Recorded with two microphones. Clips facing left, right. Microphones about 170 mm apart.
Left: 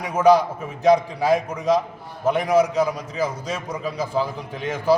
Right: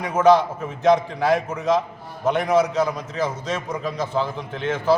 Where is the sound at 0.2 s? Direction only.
10° left (ahead or behind).